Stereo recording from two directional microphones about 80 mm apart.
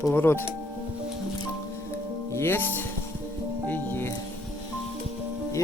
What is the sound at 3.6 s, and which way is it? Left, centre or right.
Music, left.